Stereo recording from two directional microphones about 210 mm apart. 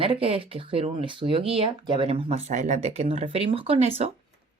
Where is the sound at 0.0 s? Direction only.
25° right (ahead or behind).